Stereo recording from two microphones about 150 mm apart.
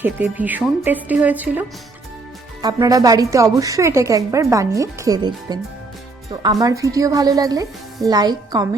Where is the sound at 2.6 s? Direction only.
25° right (ahead or behind).